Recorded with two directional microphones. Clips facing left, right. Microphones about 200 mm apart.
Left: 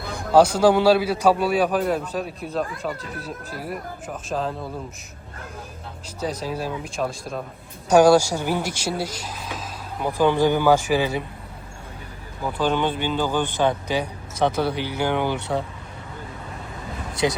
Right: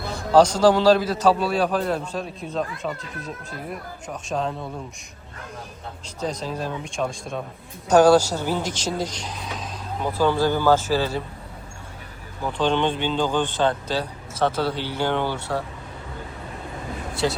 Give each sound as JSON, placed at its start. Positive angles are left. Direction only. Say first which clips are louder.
{"t": 0.2, "sound": "speech", "louder": "even", "side_deg": 10}
{"t": 6.1, "sound": "speech", "louder": "left 1 dB", "side_deg": 10}
{"t": 10.1, "sound": "speech", "louder": "left 2 dB", "side_deg": 15}
{"t": 12.5, "sound": "speech", "louder": "right 1 dB", "side_deg": 5}